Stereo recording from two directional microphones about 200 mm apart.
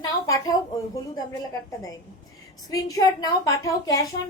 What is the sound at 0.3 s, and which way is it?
Speech, 15° left (ahead or behind).